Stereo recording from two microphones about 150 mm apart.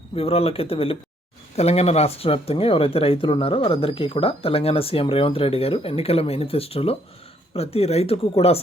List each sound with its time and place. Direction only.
0.2 s speech: 40° left (ahead or behind)